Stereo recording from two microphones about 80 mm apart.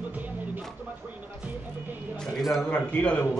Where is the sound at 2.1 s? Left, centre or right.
Centre.